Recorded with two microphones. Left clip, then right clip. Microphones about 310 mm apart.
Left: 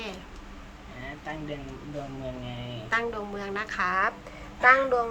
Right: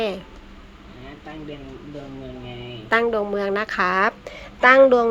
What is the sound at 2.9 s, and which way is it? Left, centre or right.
A woman's voice, centre.